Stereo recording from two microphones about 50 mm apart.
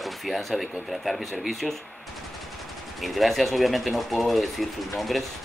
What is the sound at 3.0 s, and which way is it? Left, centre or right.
Speech, centre.